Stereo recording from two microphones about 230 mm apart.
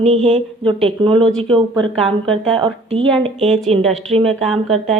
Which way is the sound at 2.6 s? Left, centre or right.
Right.